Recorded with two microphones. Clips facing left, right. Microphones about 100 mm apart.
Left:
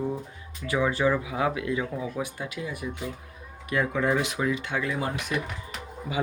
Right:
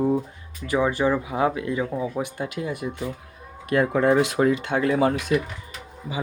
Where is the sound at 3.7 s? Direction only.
50° right (ahead or behind).